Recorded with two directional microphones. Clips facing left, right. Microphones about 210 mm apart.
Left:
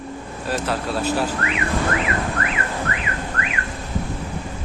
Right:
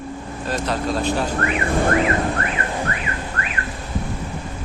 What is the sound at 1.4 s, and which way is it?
Speech, 50° right (ahead or behind).